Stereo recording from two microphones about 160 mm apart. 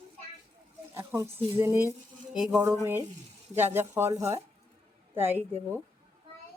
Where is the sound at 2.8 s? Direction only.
15° right (ahead or behind).